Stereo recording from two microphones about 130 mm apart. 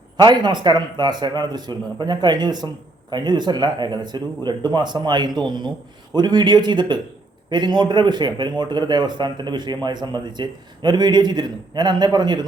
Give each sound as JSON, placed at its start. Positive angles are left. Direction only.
{"t": 0.2, "sound": "a man's voice", "side_deg": -35}